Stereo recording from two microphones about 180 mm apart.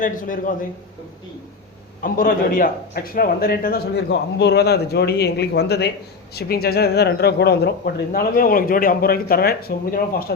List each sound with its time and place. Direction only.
0.0 s a man's voice: 50° left (ahead or behind)
2.0 s speech: 50° left (ahead or behind)